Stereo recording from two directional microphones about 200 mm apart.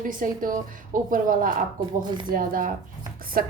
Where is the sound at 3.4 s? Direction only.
45° right (ahead or behind).